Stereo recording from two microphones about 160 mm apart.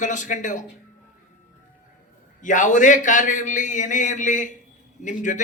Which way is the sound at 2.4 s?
50° left (ahead or behind).